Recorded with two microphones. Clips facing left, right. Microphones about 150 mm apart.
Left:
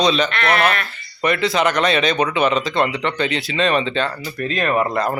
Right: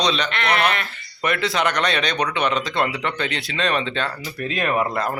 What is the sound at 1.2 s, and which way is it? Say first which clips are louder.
Speech: left 4 dB; centre (ahead or behind).